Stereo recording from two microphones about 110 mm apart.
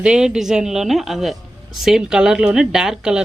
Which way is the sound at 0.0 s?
5° right (ahead or behind).